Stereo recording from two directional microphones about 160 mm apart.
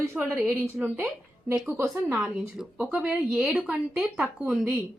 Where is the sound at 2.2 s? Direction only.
5° right (ahead or behind).